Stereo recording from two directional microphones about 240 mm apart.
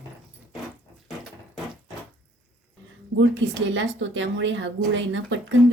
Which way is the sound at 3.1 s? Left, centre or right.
Right.